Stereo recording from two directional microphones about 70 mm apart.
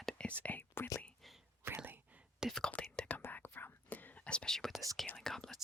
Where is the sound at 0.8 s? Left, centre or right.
Left.